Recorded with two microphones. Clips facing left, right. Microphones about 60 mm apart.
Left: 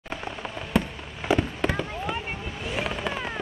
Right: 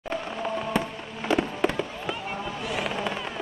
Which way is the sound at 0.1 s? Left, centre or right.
Centre.